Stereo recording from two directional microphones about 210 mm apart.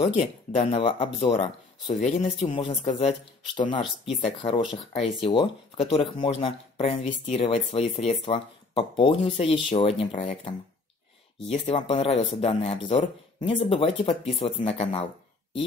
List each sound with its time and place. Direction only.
0.6 s speech: 25° left (ahead or behind)